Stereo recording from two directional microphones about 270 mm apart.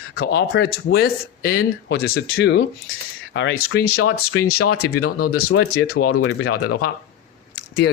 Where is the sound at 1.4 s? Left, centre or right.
Left.